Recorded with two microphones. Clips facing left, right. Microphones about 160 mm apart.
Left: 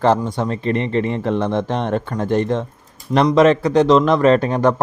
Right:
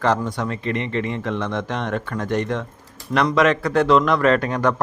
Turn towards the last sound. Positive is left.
turn(degrees=25)  # may be behind; listen again after turning